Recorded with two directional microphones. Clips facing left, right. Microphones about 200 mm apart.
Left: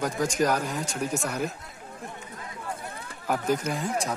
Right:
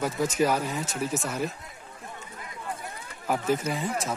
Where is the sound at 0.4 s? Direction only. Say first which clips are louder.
Right 1 dB; 5° right (ahead or behind).